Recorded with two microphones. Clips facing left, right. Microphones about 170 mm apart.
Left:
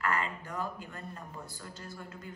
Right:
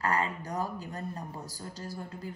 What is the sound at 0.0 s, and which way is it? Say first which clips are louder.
A man's voice: right 3 dB; 40° right (ahead or behind).